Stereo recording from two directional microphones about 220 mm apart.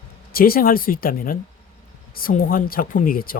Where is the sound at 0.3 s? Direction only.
40° left (ahead or behind).